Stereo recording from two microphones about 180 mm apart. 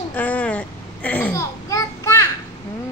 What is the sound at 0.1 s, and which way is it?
Babbling, 10° left (ahead or behind).